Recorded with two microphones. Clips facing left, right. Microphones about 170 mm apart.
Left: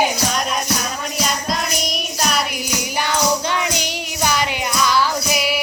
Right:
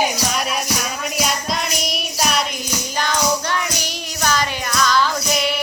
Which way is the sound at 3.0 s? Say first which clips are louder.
Left 1 dB; 15° left (ahead or behind).